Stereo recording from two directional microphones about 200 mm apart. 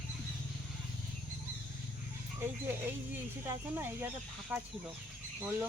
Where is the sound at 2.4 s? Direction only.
10° right (ahead or behind).